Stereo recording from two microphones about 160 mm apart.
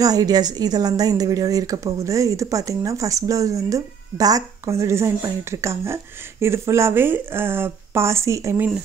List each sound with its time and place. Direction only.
0.0 s speech: 25° right (ahead or behind)